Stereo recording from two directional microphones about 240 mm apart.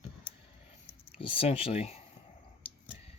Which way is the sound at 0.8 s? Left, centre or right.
Left.